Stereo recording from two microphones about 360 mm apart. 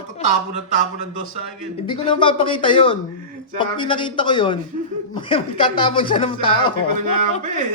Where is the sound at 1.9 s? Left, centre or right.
Centre.